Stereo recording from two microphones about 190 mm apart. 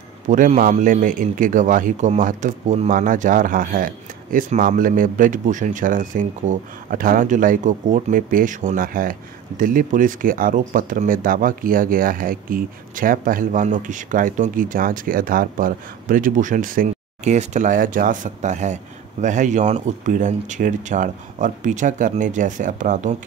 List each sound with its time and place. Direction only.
0.3 s speech: 40° right (ahead or behind)